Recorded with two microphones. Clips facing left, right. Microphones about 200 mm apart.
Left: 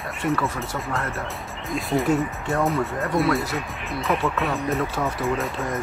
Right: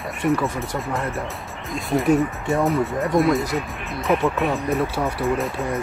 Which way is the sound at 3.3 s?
20° right (ahead or behind).